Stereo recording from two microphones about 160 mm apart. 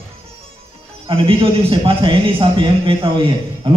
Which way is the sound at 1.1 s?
35° right (ahead or behind).